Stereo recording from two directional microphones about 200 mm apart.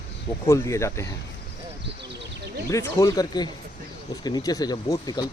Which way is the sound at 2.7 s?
15° left (ahead or behind).